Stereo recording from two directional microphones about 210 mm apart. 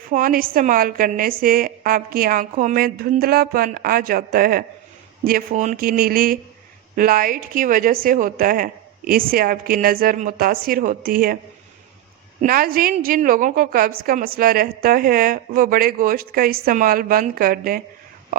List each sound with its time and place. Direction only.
0.1 s a woman's voice: 40° right (ahead or behind)
12.4 s a woman's voice: 45° right (ahead or behind)